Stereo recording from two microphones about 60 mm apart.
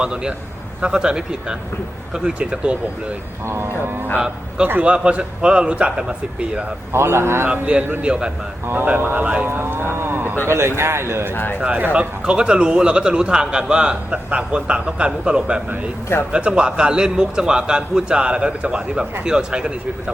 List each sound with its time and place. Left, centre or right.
0.0 s a man's voice: centre
3.4 s speech: right
4.2 s a man's voice: centre
6.9 s speech: right
7.5 s a man's voice: right
8.6 s speech: right
9.2 s speech: right
9.5 s a sound: right
10.4 s speech: right
11.6 s speech: right
12.2 s a man's voice: centre